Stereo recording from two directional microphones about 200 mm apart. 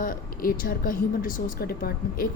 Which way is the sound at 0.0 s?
45° left (ahead or behind).